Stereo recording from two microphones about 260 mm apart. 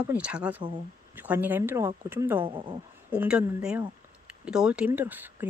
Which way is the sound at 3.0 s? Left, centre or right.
Centre.